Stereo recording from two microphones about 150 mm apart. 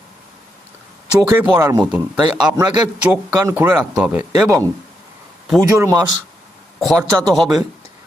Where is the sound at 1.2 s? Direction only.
15° right (ahead or behind).